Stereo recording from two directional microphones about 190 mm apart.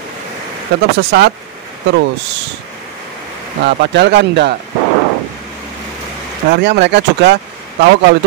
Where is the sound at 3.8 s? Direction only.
65° right (ahead or behind).